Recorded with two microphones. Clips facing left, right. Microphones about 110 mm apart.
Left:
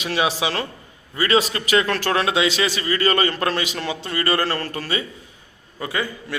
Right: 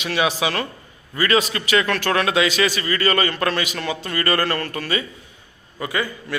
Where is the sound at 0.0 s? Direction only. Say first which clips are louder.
Right 1 dB; 30° left (ahead or behind).